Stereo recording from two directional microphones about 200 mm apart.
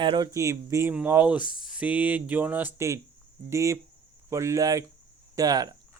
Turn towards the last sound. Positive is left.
turn(degrees=-20)  # may be behind; listen again after turning